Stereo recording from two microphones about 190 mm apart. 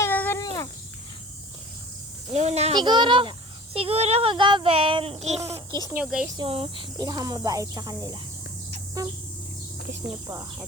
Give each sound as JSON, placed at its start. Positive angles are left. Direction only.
{"t": 0.0, "sound": "a sound", "side_deg": 10}
{"t": 2.3, "sound": "goat", "side_deg": -35}
{"t": 2.7, "sound": "speech", "side_deg": -25}
{"t": 5.5, "sound": "a child's voice", "side_deg": -20}
{"t": 6.0, "sound": "speech", "side_deg": -5}
{"t": 6.2, "sound": "speech", "side_deg": -25}
{"t": 10.1, "sound": "speech", "side_deg": -15}